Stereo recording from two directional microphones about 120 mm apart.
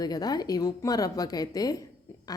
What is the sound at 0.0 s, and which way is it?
A woman's voice, 35° left (ahead or behind).